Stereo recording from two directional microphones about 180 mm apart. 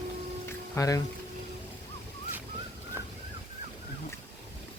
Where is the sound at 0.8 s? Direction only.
15° left (ahead or behind).